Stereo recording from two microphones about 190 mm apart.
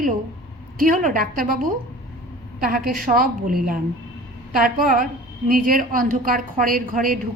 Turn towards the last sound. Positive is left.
turn(degrees=-45)  # may be behind; listen again after turning